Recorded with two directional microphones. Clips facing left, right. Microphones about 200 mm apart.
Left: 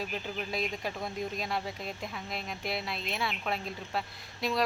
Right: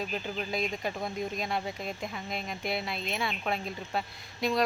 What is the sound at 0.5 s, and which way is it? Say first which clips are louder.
Speech: right 2 dB; centre (ahead or behind).